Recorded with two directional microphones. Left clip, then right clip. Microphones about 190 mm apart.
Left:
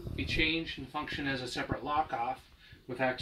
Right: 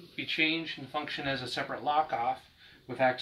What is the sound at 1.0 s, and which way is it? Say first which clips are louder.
Speech: even; 20° right (ahead or behind).